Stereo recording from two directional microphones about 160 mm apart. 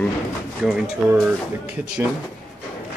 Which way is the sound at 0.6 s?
Centre (ahead or behind).